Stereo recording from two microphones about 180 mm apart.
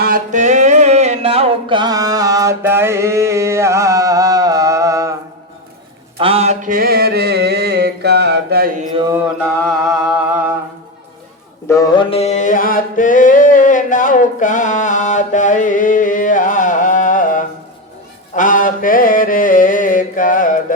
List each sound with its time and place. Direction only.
0.0 s music: 50° right (ahead or behind); by 5.1 s 15° right (ahead or behind)
6.1 s mantra: 30° right (ahead or behind); by 8.7 s 60° right (ahead or behind)
9.4 s music: centre (ahead or behind)
11.7 s mantra: 20° left (ahead or behind); by 20.7 s 45° left (ahead or behind)